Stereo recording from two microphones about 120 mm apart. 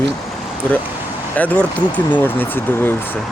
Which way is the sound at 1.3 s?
15° left (ahead or behind).